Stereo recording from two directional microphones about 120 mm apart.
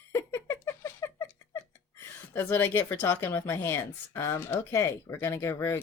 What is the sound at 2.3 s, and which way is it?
Speech, 20° left (ahead or behind).